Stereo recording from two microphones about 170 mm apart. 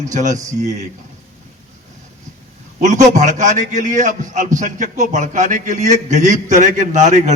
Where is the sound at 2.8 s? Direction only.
45° right (ahead or behind).